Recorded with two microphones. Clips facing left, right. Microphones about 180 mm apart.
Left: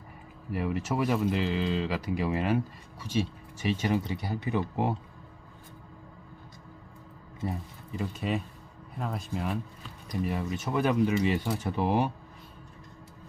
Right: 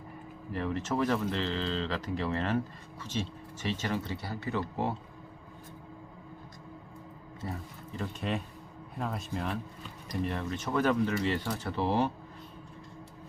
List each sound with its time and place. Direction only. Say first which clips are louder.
0.5 s speech: left 2 dB; 10° left (ahead or behind)
7.9 s a man's voice: left 3 dB; 5° left (ahead or behind)